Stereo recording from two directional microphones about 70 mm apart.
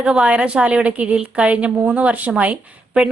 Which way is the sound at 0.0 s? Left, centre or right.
Centre.